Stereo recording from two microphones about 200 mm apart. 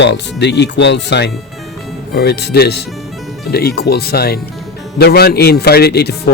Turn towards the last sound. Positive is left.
turn(degrees=55)  # may be behind; listen again after turning